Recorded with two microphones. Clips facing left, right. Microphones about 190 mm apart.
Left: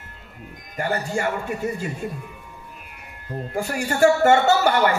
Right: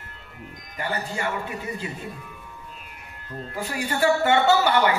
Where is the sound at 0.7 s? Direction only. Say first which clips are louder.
Left 5 dB; 50° left (ahead or behind).